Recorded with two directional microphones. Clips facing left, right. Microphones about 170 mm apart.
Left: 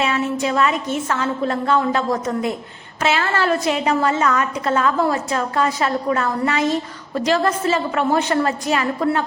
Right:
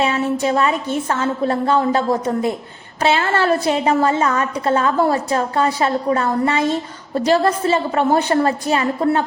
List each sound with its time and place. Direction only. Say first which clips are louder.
0.0 s a woman's voice: right 2 dB; 30° right (ahead or behind)